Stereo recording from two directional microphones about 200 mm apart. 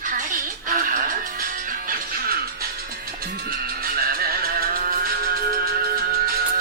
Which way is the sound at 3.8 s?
50° right (ahead or behind).